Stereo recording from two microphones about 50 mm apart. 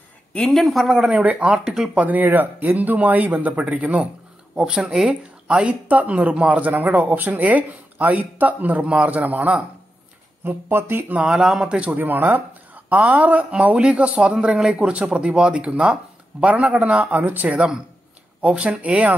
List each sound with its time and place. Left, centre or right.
0.5 s speech: centre
1.1 s speech: right
1.6 s speech: centre
2.0 s speech: right
4.6 s speech: centre
6.6 s speech: right
10.4 s speech: right
11.2 s speech: centre
11.7 s speech: right
12.0 s speech: right
17.5 s speech: centre